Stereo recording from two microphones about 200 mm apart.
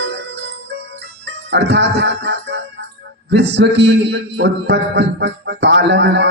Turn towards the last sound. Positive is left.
turn(degrees=-60)  # may be behind; listen again after turning